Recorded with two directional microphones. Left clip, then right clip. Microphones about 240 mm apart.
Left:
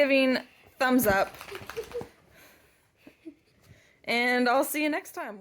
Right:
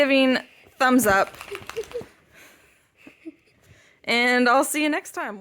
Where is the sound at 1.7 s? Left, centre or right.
Right.